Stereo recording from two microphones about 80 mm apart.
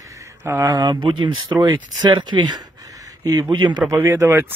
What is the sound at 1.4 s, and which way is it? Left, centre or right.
Speech, right.